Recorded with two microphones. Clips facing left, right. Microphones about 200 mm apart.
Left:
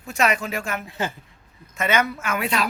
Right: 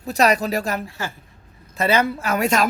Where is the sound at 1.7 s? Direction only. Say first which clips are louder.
Right 3 dB; 35° right (ahead or behind).